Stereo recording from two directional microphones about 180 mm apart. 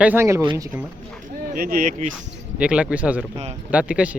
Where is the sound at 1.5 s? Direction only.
55° right (ahead or behind).